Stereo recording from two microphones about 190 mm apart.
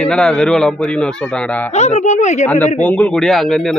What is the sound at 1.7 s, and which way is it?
Speech, 35° left (ahead or behind).